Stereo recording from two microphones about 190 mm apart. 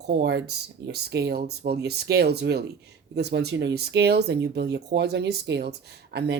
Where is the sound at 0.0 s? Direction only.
60° right (ahead or behind).